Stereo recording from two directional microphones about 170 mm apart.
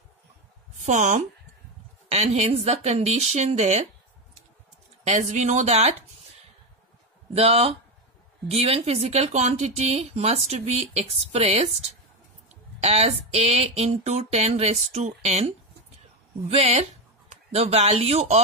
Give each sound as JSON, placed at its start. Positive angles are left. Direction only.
{"t": 0.7, "sound": "a woman's voice", "side_deg": -45}
{"t": 5.0, "sound": "a woman's voice", "side_deg": -45}
{"t": 7.3, "sound": "speech", "side_deg": -35}